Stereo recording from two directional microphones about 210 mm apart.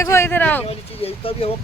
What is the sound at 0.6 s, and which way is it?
Speech, 30° left (ahead or behind).